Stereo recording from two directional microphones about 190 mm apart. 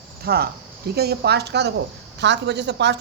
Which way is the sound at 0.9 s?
55° right (ahead or behind).